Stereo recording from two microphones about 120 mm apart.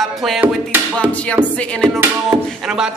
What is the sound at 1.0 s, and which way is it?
Music, 10° left (ahead or behind).